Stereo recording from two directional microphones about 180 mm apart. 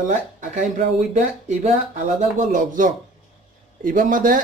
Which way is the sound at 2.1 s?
45° right (ahead or behind).